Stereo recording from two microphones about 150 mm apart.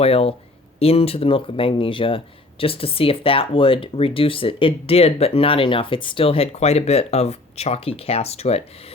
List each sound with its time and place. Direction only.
0.0 s speech: 40° left (ahead or behind)